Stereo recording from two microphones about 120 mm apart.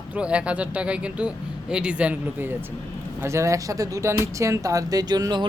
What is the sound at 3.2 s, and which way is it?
Speech, 25° right (ahead or behind).